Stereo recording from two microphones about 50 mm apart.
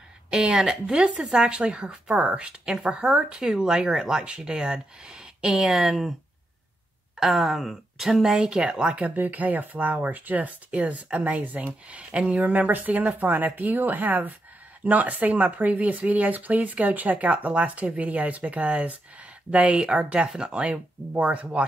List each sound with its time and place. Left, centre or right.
0.3 s a woman's voice: centre
7.2 s speech: centre
9.0 s a woman's voice: right
12.4 s a woman's voice: right